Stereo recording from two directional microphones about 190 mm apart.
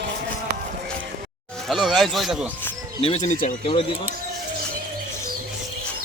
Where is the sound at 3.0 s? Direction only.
35° left (ahead or behind).